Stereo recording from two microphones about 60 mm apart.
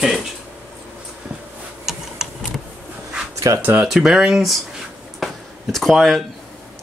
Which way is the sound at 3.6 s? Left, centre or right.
Right.